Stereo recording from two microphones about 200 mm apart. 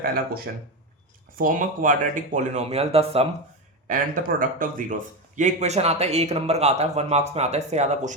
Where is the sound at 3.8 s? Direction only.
40° right (ahead or behind).